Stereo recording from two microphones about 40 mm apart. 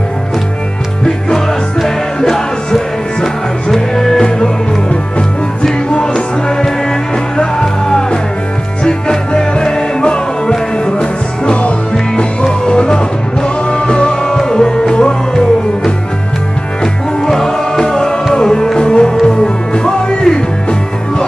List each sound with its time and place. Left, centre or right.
2.1 s music: centre
7.3 s music: centre